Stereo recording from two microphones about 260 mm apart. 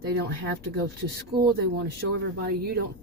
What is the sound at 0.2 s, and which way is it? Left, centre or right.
A woman's voice, right.